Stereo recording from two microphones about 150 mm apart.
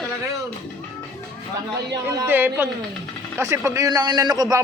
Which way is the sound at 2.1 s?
15° right (ahead or behind).